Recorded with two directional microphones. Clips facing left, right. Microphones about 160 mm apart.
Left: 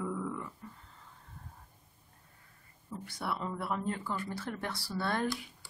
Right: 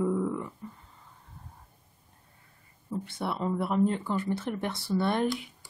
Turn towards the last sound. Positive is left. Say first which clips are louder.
# right 6 dB
turn(degrees=-20)  # may be behind; listen again after turning